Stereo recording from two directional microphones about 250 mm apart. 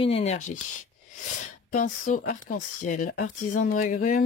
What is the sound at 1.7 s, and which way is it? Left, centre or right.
Speech, left.